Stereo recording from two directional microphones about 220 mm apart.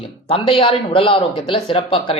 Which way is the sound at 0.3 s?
25° left (ahead or behind).